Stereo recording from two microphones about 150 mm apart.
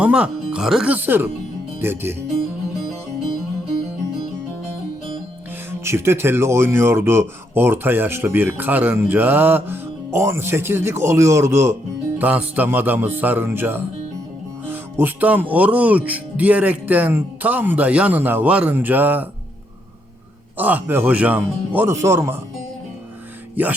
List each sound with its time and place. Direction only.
0.0 s speech: 5° right (ahead or behind)
5.8 s speech: 15° right (ahead or behind)
20.6 s speech: 10° right (ahead or behind)